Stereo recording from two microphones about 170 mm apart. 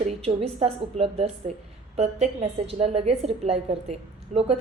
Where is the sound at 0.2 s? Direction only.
35° right (ahead or behind).